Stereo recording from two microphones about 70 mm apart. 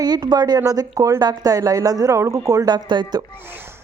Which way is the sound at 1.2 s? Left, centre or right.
Right.